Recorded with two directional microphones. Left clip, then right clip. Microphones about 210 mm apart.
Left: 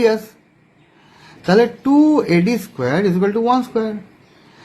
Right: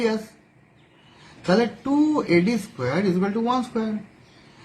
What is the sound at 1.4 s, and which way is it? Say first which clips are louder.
Speech: left 7 dB; 45° left (ahead or behind).